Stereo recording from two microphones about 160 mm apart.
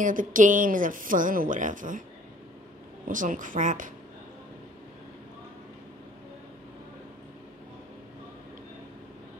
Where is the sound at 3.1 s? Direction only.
55° right (ahead or behind).